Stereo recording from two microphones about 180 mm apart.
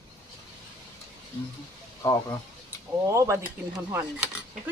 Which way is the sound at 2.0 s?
20° left (ahead or behind).